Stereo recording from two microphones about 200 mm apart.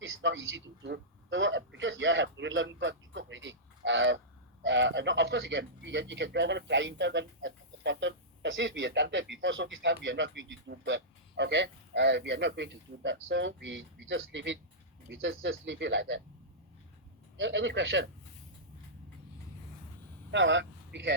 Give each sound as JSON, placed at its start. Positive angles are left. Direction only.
{"t": 0.2, "sound": "a man's voice", "side_deg": -65}
{"t": 17.3, "sound": "a man's voice", "side_deg": -65}
{"t": 20.3, "sound": "speech", "side_deg": -65}